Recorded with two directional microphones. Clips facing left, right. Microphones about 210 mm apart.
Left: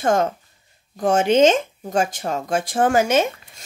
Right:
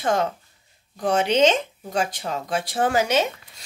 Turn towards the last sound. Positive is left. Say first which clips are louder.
# left 3 dB
turn(degrees=50)  # may be behind; listen again after turning